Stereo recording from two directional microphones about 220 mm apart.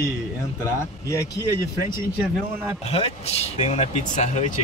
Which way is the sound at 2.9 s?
25° left (ahead or behind).